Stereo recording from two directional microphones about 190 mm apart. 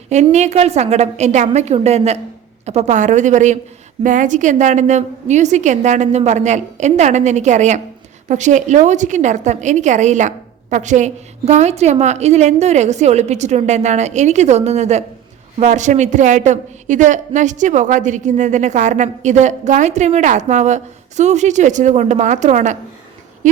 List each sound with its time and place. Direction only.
0.1 s a woman's voice: 35° right (ahead or behind)